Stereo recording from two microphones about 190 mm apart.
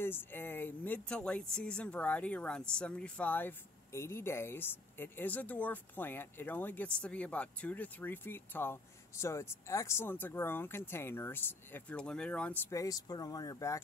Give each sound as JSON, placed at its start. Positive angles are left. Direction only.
{"t": 0.0, "sound": "speech", "side_deg": 10}